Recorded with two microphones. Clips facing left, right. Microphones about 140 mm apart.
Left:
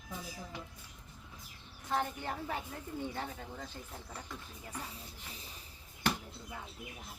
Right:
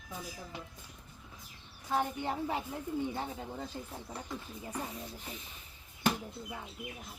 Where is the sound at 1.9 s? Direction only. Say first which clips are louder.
Right 3 dB; 15° right (ahead or behind).